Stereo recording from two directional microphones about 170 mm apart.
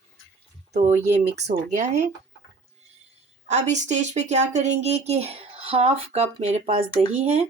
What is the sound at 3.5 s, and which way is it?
Speech, 45° right (ahead or behind).